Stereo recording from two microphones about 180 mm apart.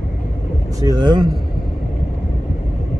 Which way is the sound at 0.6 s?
20° right (ahead or behind).